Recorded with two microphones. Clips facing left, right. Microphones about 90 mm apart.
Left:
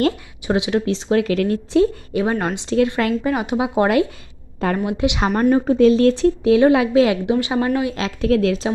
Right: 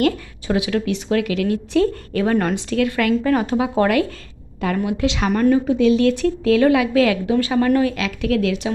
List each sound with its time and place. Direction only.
0.4 s a woman's voice: 25° left (ahead or behind)
3.3 s a woman's voice: 15° left (ahead or behind)
5.5 s a woman's voice: 40° left (ahead or behind); by 7.9 s 15° left (ahead or behind)
7.9 s a woman's voice: 30° left (ahead or behind)